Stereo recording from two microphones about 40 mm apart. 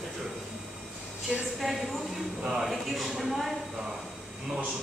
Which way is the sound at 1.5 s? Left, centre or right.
Centre.